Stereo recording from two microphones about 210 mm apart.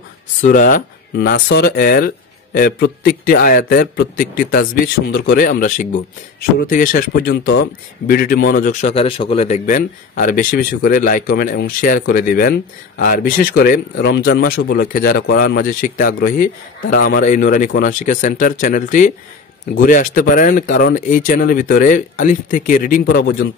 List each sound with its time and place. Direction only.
0.4 s speech: 40° left (ahead or behind)